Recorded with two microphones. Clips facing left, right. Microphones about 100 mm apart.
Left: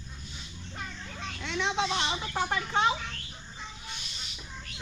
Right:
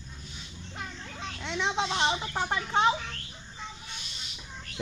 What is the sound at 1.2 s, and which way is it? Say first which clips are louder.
Speech: even; 25° right (ahead or behind).